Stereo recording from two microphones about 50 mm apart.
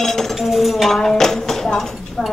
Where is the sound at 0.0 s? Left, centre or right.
Centre.